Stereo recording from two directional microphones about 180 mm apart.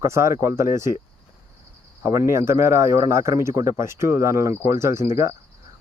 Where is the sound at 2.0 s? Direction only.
15° right (ahead or behind).